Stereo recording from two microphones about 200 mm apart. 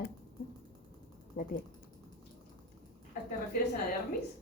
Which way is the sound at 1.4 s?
45° left (ahead or behind).